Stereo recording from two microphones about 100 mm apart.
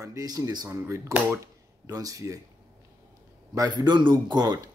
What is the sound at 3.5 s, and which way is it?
A man's voice, 45° right (ahead or behind).